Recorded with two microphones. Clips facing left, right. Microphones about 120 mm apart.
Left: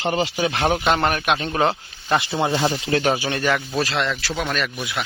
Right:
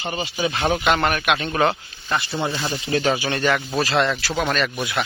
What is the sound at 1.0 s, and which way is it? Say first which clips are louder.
A man's voice: even; 30° left (ahead or behind).